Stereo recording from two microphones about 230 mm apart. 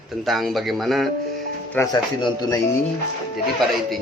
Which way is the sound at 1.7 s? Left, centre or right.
Centre.